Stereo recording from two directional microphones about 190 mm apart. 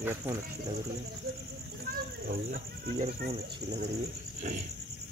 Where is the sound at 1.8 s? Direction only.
50° right (ahead or behind).